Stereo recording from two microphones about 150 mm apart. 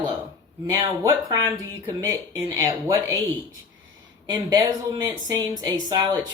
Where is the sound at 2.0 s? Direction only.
25° right (ahead or behind).